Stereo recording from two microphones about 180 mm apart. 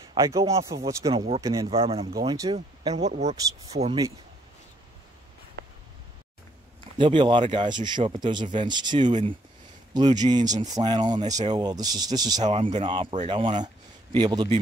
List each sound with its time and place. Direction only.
0.1 s speech: 20° right (ahead or behind)
1.1 s speech: 35° right (ahead or behind)
1.4 s speech: 20° right (ahead or behind)
1.7 s speech: 35° right (ahead or behind)
2.1 s speech: 20° right (ahead or behind)
2.5 s speech: 35° right (ahead or behind)
3.4 s speech: 20° right (ahead or behind)
7.0 s speech: 30° right (ahead or behind)
9.0 s speech: 40° right (ahead or behind)
9.9 s speech: 25° right (ahead or behind)
12.4 s speech: 35° right (ahead or behind)